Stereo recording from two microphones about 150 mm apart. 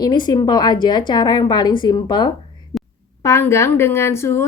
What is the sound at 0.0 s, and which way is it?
A woman's voice, 30° left (ahead or behind).